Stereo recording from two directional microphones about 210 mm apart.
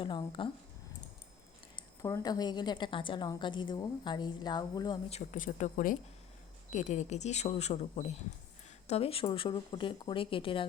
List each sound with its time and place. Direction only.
0.0 s a woman's voice: 20° left (ahead or behind)
2.0 s a woman's voice: 15° left (ahead or behind)